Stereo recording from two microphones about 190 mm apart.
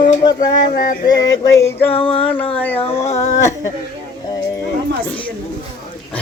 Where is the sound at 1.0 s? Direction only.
20° left (ahead or behind).